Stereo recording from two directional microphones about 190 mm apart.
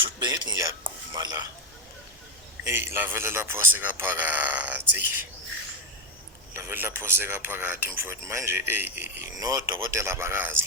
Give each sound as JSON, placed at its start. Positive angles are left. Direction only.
{"t": 0.0, "sound": "a sound", "side_deg": -20}
{"t": 2.6, "sound": "speech", "side_deg": -10}
{"t": 6.5, "sound": "speech", "side_deg": -10}